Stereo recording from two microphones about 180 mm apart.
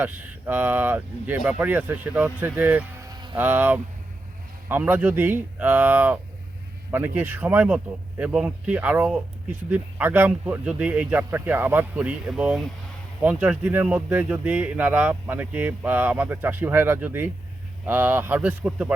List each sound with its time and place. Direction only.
0.0 s speech: 10° right (ahead or behind)
3.0 s a sound: 20° right (ahead or behind)
3.3 s speech: 10° right (ahead or behind)